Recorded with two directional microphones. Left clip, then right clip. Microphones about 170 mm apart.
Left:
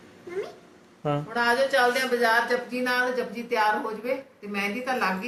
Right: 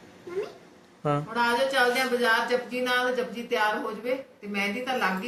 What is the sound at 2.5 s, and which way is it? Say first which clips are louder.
Speech: even; 15° right (ahead or behind).